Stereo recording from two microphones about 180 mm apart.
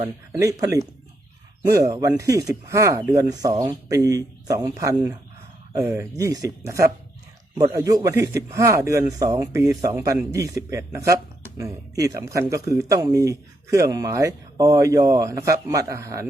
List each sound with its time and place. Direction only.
0.0 s speech: 20° right (ahead or behind)